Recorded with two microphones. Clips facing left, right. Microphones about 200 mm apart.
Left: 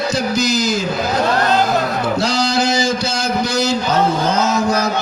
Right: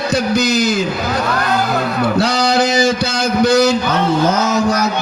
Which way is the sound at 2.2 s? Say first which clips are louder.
Right 3 dB; 60° right (ahead or behind).